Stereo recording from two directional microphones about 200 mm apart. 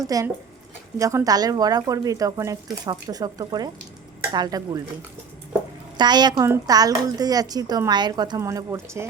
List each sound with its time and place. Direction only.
0.0 s a woman's voice: 15° right (ahead or behind)
6.0 s a woman's voice: 20° right (ahead or behind)